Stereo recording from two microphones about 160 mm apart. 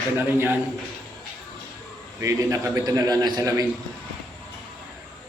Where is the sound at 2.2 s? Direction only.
20° right (ahead or behind).